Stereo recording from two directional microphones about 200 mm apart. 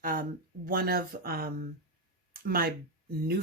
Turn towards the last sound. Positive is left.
turn(degrees=-50)  # may be behind; listen again after turning